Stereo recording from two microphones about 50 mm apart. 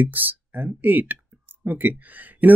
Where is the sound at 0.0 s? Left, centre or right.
Right.